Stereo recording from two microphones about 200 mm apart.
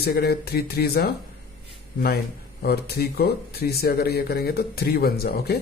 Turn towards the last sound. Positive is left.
turn(degrees=50)  # may be behind; listen again after turning